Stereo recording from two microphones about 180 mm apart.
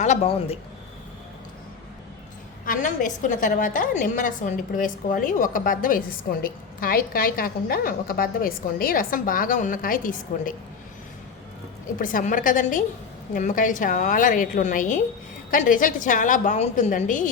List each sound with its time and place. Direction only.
0.0 s a man's voice: 35° left (ahead or behind)
2.6 s a woman's voice: 45° left (ahead or behind)
11.9 s a woman's voice: 50° left (ahead or behind)